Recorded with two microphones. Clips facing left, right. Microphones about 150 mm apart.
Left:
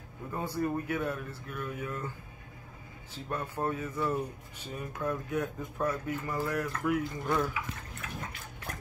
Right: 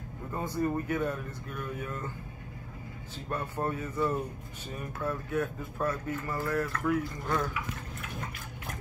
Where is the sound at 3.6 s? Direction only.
15° left (ahead or behind).